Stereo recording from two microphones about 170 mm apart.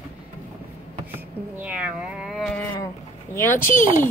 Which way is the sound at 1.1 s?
10° right (ahead or behind).